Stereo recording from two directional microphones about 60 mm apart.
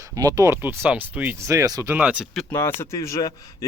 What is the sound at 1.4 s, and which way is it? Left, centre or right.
Speech, right.